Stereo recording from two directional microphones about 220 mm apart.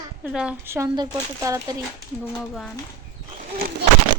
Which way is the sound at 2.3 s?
5° left (ahead or behind).